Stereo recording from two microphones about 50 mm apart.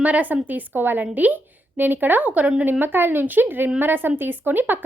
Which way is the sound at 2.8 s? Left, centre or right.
Right.